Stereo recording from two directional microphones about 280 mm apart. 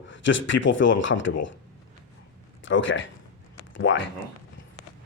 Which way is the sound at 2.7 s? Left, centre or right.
Left.